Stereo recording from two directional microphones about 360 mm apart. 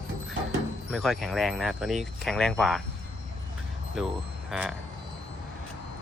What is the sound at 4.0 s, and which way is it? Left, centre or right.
Speech, centre.